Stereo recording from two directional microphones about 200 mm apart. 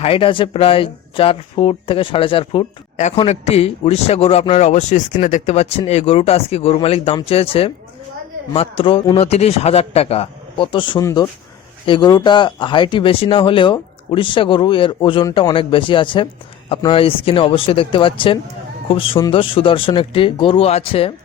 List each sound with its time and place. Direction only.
0.0 s speech: 25° left (ahead or behind)